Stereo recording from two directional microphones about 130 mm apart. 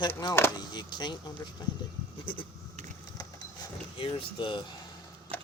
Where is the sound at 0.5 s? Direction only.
35° left (ahead or behind).